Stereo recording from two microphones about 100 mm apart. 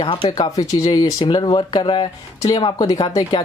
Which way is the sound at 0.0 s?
55° left (ahead or behind).